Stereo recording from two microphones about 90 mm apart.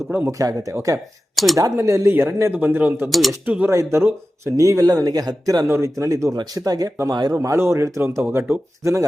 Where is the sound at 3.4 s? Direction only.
15° right (ahead or behind).